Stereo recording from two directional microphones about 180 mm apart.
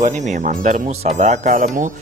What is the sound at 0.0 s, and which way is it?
Speech, 40° right (ahead or behind).